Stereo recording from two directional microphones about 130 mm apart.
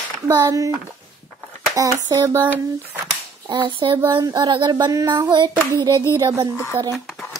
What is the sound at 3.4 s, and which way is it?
Clapping, 40° right (ahead or behind).